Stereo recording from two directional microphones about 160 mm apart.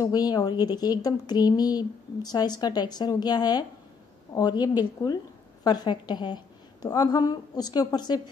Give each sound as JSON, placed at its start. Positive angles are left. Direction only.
{"t": 0.0, "sound": "a woman's voice", "side_deg": 25}